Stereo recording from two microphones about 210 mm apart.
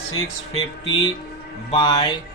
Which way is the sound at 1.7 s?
20° left (ahead or behind).